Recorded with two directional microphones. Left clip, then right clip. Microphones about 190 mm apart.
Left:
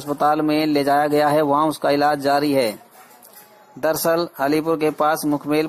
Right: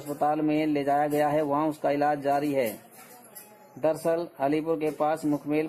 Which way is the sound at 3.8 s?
25° left (ahead or behind).